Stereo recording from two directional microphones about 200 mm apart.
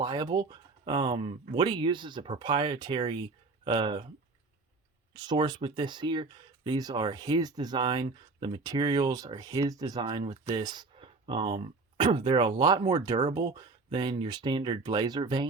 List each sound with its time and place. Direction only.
0.0 s speech: 20° right (ahead or behind)
5.1 s speech: 20° right (ahead or behind)